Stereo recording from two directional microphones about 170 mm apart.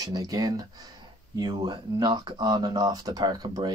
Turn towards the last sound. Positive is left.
turn(degrees=-25)  # may be behind; listen again after turning